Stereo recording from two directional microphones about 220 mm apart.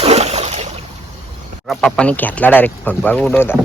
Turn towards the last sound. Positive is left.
turn(degrees=10)  # may be behind; listen again after turning